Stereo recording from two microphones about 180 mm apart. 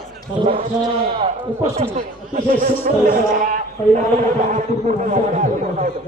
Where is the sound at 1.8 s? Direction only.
35° right (ahead or behind).